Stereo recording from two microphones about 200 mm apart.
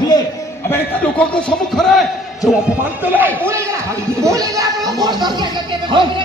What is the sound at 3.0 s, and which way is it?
Speech, 10° right (ahead or behind).